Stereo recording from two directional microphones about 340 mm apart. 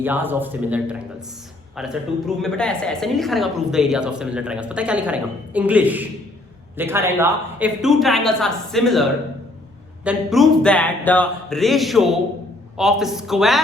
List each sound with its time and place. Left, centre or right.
0.0 s a woman's voice: centre